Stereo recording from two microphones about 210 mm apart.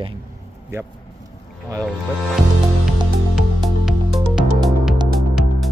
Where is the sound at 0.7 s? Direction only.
10° right (ahead or behind).